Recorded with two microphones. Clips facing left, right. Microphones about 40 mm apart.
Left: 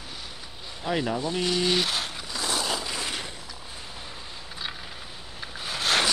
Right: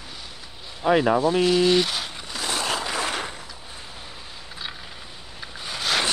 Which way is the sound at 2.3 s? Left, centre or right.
Right.